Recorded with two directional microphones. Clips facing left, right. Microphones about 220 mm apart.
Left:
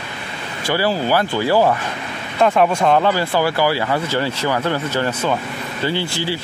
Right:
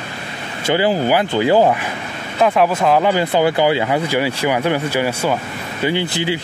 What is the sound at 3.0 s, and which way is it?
Speech, 20° right (ahead or behind).